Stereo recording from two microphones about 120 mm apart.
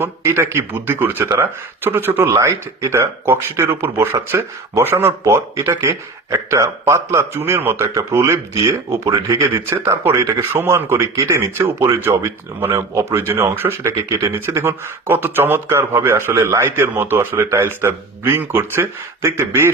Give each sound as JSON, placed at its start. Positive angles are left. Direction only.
{"t": 0.0, "sound": "speech", "side_deg": -25}